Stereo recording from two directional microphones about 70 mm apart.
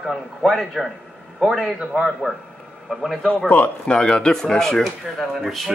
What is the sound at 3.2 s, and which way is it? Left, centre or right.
Speech, left.